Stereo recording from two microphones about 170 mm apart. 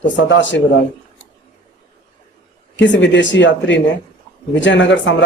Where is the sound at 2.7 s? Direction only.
90° left.